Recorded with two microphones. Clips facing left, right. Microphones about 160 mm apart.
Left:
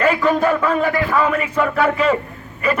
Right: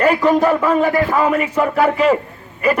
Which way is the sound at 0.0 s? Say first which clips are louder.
Right 3 dB; 35° right (ahead or behind).